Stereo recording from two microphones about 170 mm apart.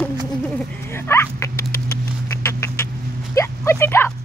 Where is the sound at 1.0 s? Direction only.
15° left (ahead or behind).